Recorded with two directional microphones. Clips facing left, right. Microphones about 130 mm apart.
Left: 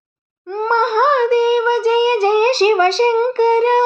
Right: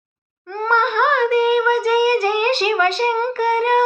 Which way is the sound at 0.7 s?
30° left (ahead or behind).